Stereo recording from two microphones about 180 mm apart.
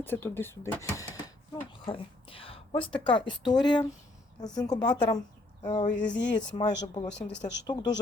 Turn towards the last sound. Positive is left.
turn(degrees=25)  # may be behind; listen again after turning